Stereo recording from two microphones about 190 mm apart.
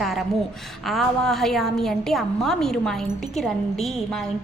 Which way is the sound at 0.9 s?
Centre (ahead or behind).